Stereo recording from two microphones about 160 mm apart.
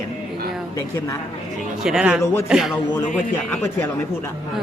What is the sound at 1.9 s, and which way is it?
Speech, 5° right (ahead or behind).